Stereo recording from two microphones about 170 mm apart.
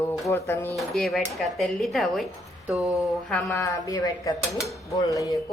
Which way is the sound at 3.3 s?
10° left (ahead or behind).